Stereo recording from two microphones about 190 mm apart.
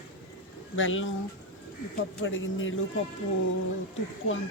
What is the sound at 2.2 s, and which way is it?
Speech, 90° left.